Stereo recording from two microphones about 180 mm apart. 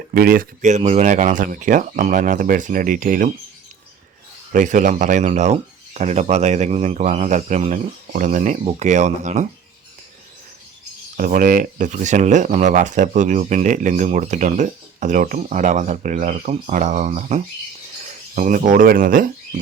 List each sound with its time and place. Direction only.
0.1 s speech: 55° right (ahead or behind)
4.5 s speech: 45° right (ahead or behind)
11.2 s speech: 50° right (ahead or behind)